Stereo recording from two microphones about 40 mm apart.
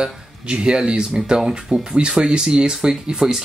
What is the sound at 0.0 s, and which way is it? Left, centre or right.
Speech, right.